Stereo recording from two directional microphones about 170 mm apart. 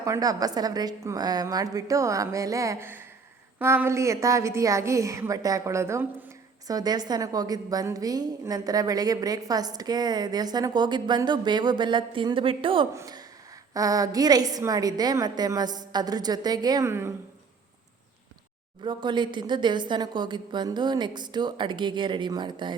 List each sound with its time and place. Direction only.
0.0 s a woman's voice: 20° right (ahead or behind)
18.8 s a woman's voice: 25° right (ahead or behind)